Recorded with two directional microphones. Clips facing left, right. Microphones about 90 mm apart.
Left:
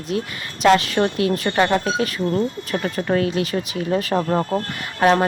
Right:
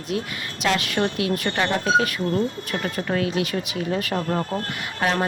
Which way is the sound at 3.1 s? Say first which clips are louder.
Left 4 dB; 35° left (ahead or behind).